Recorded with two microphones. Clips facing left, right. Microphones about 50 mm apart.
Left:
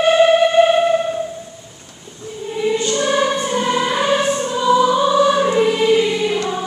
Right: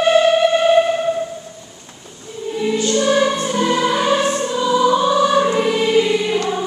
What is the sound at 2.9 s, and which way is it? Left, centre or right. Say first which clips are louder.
Music: right 1 dB; centre.